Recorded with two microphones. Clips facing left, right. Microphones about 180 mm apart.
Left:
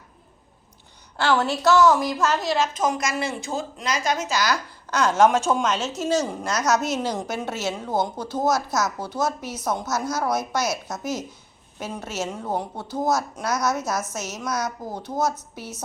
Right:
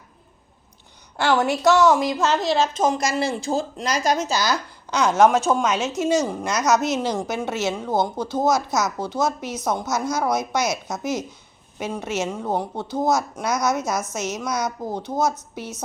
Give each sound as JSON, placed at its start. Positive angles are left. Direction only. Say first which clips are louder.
{"t": 1.1, "sound": "a woman's voice", "louder": "right 2 dB", "side_deg": -15}
{"t": 4.9, "sound": "a woman's voice", "louder": "right 2 dB", "side_deg": -15}
{"t": 6.1, "sound": "speech", "louder": "right 1 dB", "side_deg": 5}